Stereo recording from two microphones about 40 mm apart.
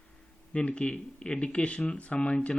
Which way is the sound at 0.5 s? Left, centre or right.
Left.